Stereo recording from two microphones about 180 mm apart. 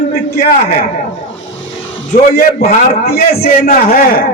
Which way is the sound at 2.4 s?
55° left (ahead or behind).